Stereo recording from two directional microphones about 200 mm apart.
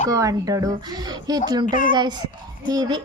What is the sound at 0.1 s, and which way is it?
Speech, 15° right (ahead or behind).